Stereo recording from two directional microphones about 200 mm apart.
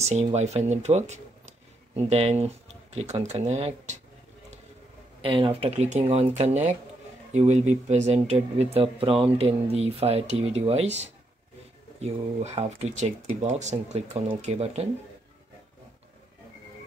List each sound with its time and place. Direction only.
0.1 s speech: 35° right (ahead or behind)
5.2 s speech: 25° right (ahead or behind)